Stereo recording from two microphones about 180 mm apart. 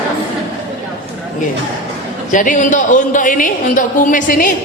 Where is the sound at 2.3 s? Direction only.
45° left (ahead or behind).